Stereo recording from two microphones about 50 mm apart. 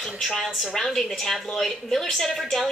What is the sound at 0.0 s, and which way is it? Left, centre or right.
A woman's voice, centre.